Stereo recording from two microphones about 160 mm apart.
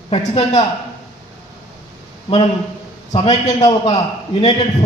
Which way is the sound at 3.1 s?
40° left (ahead or behind).